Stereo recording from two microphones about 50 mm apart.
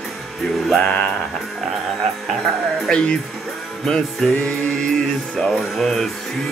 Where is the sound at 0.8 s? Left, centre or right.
Left.